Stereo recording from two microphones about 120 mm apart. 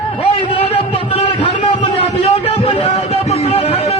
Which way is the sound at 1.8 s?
55° left (ahead or behind).